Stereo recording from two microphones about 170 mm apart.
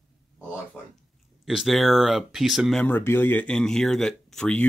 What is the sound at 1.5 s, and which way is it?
Speech, centre (ahead or behind).